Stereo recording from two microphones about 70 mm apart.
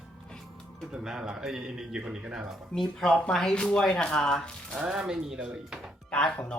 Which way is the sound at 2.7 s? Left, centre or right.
Centre.